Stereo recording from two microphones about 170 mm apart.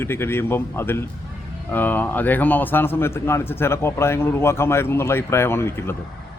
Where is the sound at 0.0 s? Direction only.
15° left (ahead or behind).